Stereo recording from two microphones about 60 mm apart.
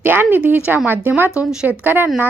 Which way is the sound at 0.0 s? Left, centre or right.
Right.